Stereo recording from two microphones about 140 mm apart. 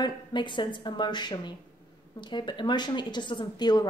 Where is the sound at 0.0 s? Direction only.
35° left (ahead or behind).